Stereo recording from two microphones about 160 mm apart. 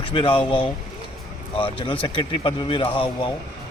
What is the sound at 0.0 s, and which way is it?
A man's voice, 30° left (ahead or behind).